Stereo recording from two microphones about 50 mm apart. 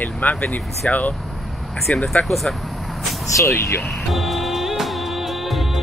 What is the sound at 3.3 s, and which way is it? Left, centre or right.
Speech, left.